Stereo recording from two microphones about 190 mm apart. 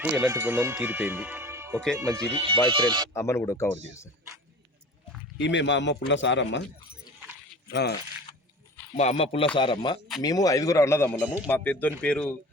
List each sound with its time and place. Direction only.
0.0 s speech: 15° right (ahead or behind)
3.1 s a man's voice: 15° left (ahead or behind)
5.4 s a man's voice: 70° left (ahead or behind)
7.7 s speech: 60° left (ahead or behind)
9.0 s a man's voice: 35° left (ahead or behind); by 12.3 s 5° left (ahead or behind)